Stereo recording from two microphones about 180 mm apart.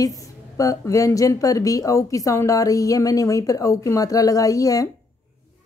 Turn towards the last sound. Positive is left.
turn(degrees=20)  # may be behind; listen again after turning